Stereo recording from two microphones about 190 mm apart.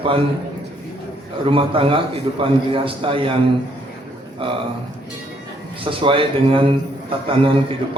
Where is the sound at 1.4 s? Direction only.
25° right (ahead or behind).